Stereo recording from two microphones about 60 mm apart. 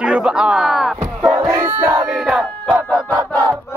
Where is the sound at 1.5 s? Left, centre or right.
Right.